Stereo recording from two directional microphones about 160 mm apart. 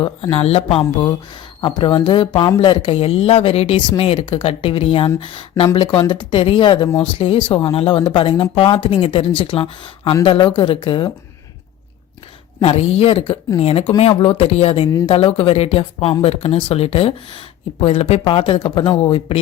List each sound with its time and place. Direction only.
0.0 s speech: 40° left (ahead or behind)
6.8 s speech: 10° left (ahead or behind)
7.2 s speech: 30° left (ahead or behind)
12.6 s speech: 40° left (ahead or behind)